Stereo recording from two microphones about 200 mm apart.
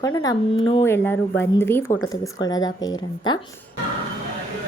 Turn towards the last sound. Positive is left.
turn(degrees=20)  # may be behind; listen again after turning